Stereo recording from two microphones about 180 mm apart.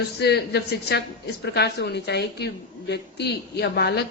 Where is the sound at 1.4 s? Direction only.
65° left (ahead or behind).